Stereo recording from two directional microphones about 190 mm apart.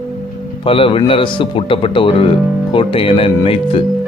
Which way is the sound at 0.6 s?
30° left (ahead or behind).